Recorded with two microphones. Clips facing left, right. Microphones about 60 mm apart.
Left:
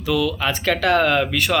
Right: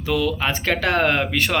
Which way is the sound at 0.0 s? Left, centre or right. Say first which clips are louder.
Left 1 dB; right.